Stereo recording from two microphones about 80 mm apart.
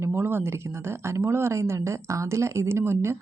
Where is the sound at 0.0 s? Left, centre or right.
Right.